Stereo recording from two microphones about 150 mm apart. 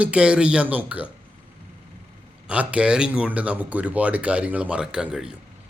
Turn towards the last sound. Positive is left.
turn(degrees=-5)  # may be behind; listen again after turning